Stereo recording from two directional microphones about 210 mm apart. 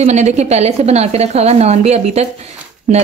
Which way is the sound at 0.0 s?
30° right (ahead or behind).